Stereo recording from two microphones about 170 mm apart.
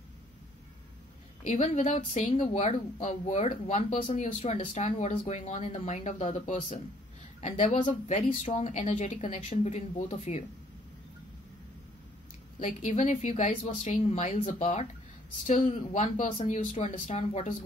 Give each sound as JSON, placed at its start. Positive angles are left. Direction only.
{"t": 1.5, "sound": "speech", "side_deg": 45}
{"t": 5.3, "sound": "speech", "side_deg": 45}
{"t": 12.5, "sound": "speech", "side_deg": 45}